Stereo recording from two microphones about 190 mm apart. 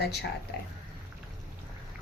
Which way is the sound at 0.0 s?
60° left (ahead or behind).